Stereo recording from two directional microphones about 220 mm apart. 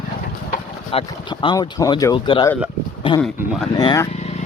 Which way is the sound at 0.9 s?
20° left (ahead or behind).